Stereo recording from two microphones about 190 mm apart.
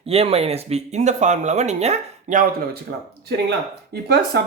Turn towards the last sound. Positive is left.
turn(degrees=-55)  # may be behind; listen again after turning